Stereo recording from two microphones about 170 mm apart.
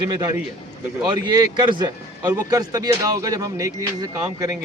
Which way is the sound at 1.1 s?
25° right (ahead or behind).